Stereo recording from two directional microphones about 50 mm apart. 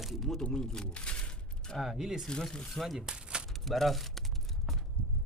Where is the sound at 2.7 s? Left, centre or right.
Centre.